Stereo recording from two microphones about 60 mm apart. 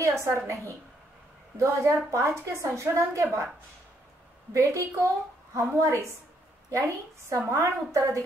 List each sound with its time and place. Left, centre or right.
0.0 s a woman's voice: right
1.6 s a woman's voice: right
4.6 s a woman's voice: right